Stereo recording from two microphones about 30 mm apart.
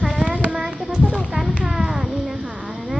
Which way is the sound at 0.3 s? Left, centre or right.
Right.